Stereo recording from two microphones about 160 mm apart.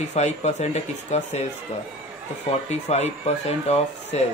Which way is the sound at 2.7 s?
45° left (ahead or behind).